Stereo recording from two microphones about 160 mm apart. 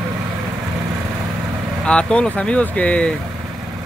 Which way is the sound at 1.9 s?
5° left (ahead or behind).